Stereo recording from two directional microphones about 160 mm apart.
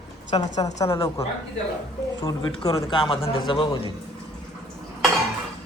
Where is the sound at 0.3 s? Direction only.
35° left (ahead or behind).